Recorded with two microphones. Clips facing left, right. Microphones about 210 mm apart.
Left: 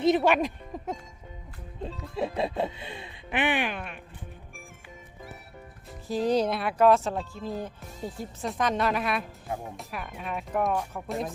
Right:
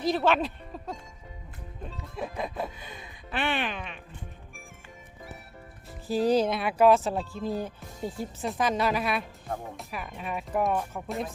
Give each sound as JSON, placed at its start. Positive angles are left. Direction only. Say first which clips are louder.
{"t": 0.0, "sound": "speech", "louder": "left 3 dB", "side_deg": 15}
{"t": 2.1, "sound": "chicken", "louder": "left 5 dB", "side_deg": 30}
{"t": 3.2, "sound": "speech", "louder": "left 3 dB", "side_deg": 15}
{"t": 6.1, "sound": "speech", "louder": "right 1 dB", "side_deg": -5}